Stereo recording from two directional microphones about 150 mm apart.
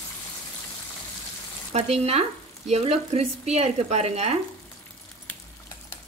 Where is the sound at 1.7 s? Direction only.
45° right (ahead or behind).